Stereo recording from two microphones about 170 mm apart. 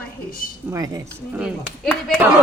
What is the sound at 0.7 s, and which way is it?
Speech, 20° right (ahead or behind).